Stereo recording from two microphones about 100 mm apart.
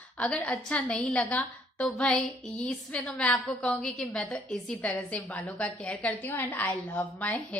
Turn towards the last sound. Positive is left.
turn(degrees=15)  # may be behind; listen again after turning